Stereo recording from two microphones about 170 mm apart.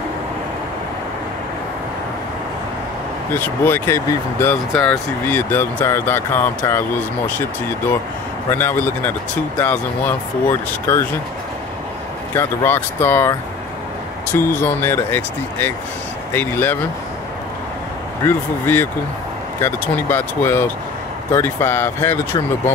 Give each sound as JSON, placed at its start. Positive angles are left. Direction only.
{"t": 3.3, "sound": "speech", "side_deg": 10}
{"t": 8.5, "sound": "speech", "side_deg": 15}
{"t": 12.4, "sound": "speech", "side_deg": 15}
{"t": 18.2, "sound": "speech", "side_deg": 15}